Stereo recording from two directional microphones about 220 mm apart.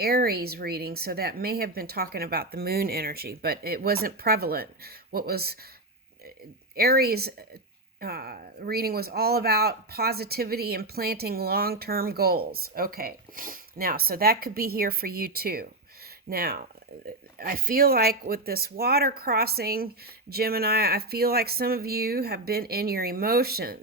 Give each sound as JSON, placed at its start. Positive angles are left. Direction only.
{"t": 0.0, "sound": "speech", "side_deg": -45}
{"t": 6.7, "sound": "speech", "side_deg": -45}